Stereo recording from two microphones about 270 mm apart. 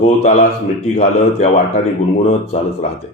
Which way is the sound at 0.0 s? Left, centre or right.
Left.